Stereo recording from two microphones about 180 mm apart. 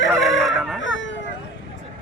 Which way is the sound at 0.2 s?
Centre (ahead or behind).